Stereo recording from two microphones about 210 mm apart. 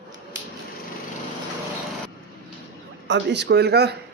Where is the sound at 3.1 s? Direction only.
55° right (ahead or behind).